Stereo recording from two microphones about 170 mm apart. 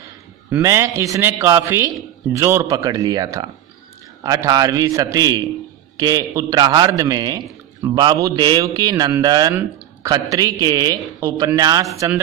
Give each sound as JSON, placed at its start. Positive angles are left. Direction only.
{"t": 0.5, "sound": "a man's voice", "side_deg": -15}